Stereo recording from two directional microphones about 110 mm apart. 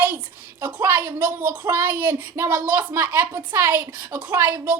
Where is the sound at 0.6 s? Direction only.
20° right (ahead or behind).